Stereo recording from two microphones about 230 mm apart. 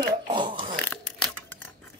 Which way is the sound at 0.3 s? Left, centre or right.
Right.